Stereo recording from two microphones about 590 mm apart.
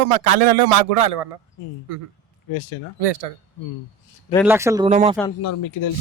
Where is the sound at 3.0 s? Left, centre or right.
Right.